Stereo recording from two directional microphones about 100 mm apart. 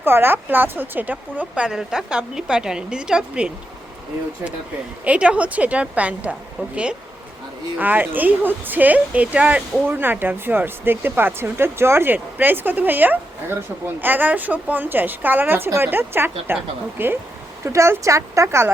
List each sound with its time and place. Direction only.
0.0 s a woman's voice: 25° right (ahead or behind)
5.0 s a woman's voice: 10° right (ahead or behind)
7.8 s a woman's voice: 15° right (ahead or behind)